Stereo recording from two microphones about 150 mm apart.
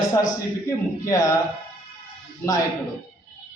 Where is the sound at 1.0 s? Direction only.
20° left (ahead or behind).